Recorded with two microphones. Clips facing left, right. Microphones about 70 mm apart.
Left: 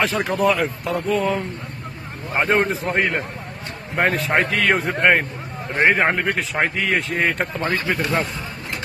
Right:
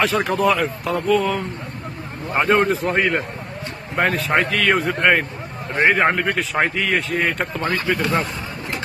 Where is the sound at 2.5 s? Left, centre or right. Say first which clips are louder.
Right 3 dB; left.